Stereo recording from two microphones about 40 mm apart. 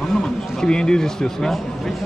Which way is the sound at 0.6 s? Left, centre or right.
Centre.